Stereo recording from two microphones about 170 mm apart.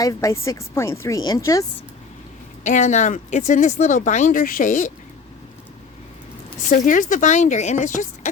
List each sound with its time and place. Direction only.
0.0 s speech: 15° left (ahead or behind)
2.6 s speech: 45° left (ahead or behind)
6.7 s speech: 50° left (ahead or behind)